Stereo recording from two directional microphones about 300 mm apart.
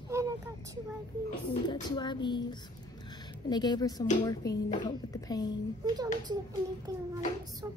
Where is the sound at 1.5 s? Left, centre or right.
Centre.